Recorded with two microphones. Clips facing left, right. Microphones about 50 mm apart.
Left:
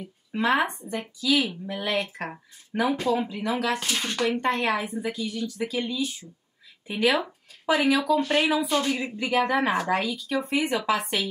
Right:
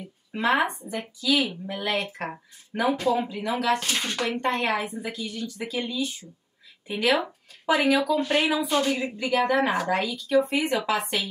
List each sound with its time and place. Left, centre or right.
0.0 s speech: centre
2.8 s speech: centre